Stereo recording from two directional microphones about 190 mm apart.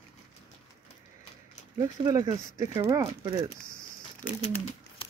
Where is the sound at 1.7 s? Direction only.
15° right (ahead or behind).